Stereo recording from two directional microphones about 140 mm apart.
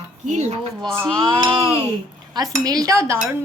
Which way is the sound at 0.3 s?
55° right (ahead or behind).